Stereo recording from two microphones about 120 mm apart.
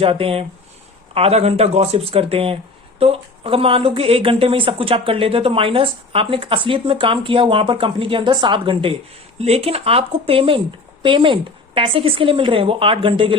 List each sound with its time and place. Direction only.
0.0 s speech: 50° right (ahead or behind)
9.4 s speech: 60° right (ahead or behind)